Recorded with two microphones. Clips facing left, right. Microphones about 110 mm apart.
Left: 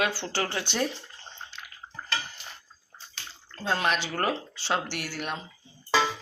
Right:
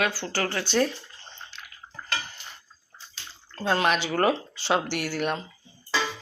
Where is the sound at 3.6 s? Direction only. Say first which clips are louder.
Right 3 dB; centre (ahead or behind).